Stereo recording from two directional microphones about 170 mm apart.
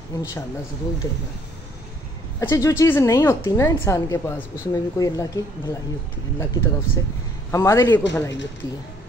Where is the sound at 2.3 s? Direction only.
20° left (ahead or behind).